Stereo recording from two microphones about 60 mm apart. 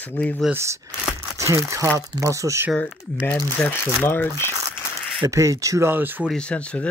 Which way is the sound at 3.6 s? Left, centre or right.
Centre.